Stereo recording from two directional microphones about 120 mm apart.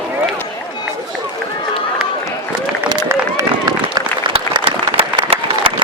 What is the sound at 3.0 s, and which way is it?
Run, 25° right (ahead or behind).